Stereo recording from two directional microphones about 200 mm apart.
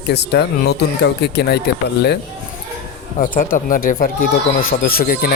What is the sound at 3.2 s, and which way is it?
Speech, 40° left (ahead or behind).